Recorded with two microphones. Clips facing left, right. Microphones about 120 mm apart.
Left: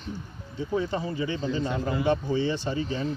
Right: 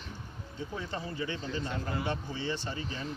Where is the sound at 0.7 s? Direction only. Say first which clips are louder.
Left 9 dB; 15° left (ahead or behind).